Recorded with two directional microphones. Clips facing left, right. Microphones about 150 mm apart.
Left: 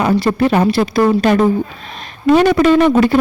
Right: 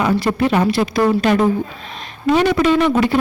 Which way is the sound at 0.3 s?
40° left (ahead or behind).